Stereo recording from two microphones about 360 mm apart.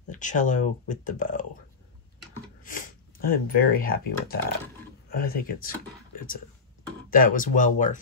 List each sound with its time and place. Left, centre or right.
0.1 s speech: left
2.6 s speech: left